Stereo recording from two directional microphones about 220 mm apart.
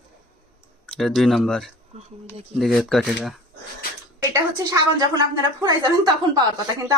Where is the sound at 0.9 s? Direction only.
Centre (ahead or behind).